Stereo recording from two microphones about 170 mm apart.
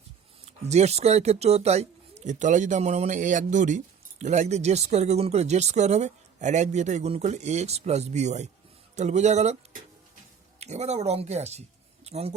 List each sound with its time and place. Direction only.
0.4 s speech: 40° right (ahead or behind)
10.6 s speech: 40° right (ahead or behind)